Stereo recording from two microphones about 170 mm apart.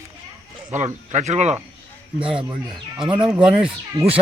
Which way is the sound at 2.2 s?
30° right (ahead or behind).